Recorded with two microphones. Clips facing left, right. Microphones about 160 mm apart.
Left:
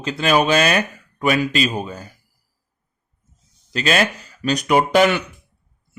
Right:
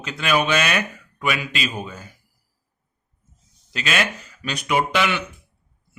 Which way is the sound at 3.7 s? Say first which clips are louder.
Left 5 dB; 35° left (ahead or behind).